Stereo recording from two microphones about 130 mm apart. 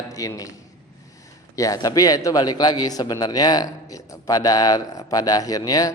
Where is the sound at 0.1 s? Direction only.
25° left (ahead or behind).